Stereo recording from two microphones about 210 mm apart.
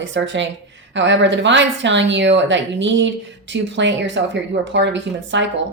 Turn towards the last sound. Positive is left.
turn(degrees=-60)  # may be behind; listen again after turning